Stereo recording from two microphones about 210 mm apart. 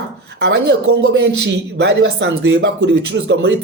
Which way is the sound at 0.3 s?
50° right (ahead or behind).